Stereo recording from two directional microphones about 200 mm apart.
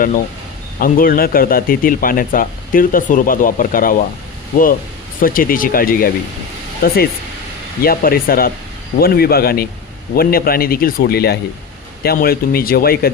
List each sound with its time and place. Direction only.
0.8 s speech: 45° left (ahead or behind)
5.2 s speech: 45° left (ahead or behind)